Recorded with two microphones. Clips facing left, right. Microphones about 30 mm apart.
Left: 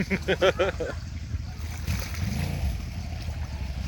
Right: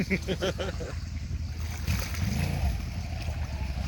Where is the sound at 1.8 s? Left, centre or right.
Centre.